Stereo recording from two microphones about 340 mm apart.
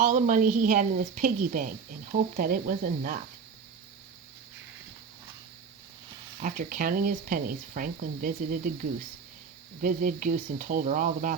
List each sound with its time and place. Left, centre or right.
0.0 s speech: right
6.4 s speech: right